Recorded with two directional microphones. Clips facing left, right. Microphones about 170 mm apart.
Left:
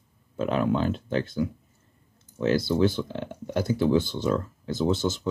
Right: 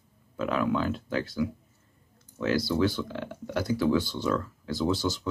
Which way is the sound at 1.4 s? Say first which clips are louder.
Left 1 dB; 40° left (ahead or behind).